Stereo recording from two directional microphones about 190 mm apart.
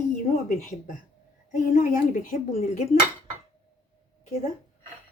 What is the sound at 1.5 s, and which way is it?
A woman's voice, 45° left (ahead or behind).